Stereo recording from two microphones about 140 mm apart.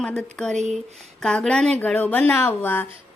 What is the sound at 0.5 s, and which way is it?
Speech, 55° right (ahead or behind).